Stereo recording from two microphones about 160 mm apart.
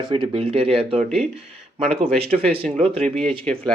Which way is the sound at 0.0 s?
30° right (ahead or behind).